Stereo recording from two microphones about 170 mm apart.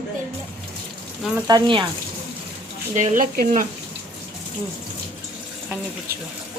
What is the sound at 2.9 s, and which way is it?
Speech, 45° right (ahead or behind).